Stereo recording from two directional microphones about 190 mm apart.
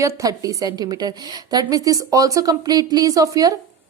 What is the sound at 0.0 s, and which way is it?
A woman's voice, 15° right (ahead or behind).